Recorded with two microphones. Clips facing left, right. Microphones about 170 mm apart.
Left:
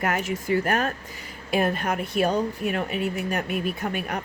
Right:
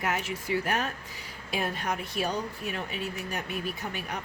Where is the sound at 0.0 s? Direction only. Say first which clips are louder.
Left 5 dB; 50° left (ahead or behind).